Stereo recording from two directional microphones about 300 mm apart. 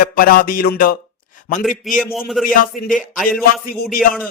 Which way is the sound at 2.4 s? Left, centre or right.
Left.